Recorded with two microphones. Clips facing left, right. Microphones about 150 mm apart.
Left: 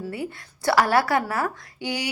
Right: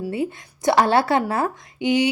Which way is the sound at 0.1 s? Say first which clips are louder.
Right 6 dB; 20° right (ahead or behind).